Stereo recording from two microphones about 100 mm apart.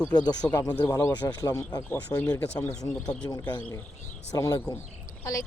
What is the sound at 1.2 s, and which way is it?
Speech, 40° left (ahead or behind).